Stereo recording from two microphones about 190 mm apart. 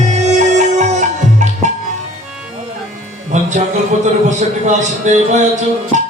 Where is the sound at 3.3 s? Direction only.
40° right (ahead or behind).